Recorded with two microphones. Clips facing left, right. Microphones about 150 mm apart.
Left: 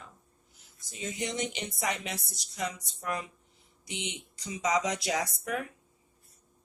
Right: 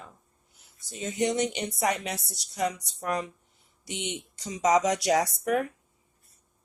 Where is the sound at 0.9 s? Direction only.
40° right (ahead or behind).